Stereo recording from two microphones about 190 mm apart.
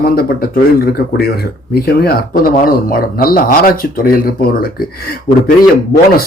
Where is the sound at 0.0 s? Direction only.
50° left (ahead or behind).